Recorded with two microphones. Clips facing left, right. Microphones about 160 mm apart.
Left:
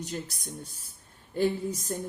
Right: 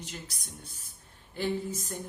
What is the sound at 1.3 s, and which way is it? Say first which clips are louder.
Speech: left 4 dB; 40° left (ahead or behind).